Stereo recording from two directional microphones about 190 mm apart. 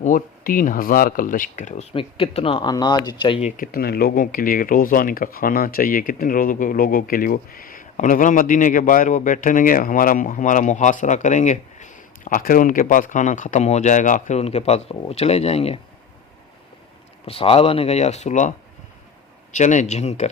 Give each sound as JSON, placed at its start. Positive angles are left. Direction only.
{"t": 0.0, "sound": "speech", "side_deg": 45}
{"t": 3.6, "sound": "speech", "side_deg": 50}
{"t": 17.2, "sound": "speech", "side_deg": 30}
{"t": 19.5, "sound": "speech", "side_deg": 40}